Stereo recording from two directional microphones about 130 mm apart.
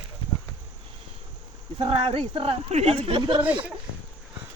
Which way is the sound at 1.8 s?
50° right (ahead or behind).